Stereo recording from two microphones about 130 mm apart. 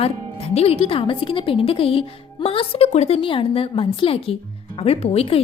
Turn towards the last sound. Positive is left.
turn(degrees=50)  # may be behind; listen again after turning